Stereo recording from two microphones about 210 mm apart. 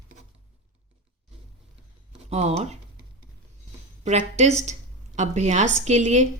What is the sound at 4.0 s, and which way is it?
Speech, 30° right (ahead or behind).